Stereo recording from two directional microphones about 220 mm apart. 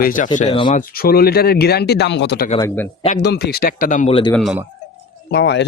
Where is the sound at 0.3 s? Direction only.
25° left (ahead or behind).